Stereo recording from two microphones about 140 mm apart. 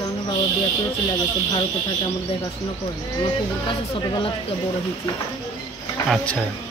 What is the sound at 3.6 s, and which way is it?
Speech, 40° left (ahead or behind).